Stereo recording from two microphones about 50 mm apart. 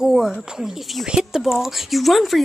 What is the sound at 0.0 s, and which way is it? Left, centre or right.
A woman's voice, centre.